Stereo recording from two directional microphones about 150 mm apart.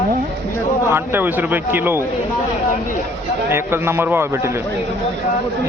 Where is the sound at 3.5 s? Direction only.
15° right (ahead or behind).